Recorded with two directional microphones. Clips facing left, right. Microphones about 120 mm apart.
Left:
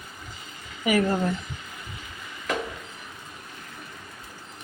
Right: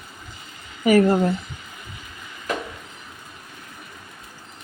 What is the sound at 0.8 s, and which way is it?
Speech, 40° right (ahead or behind).